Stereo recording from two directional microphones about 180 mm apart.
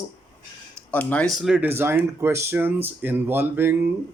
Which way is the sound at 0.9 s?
10° left (ahead or behind).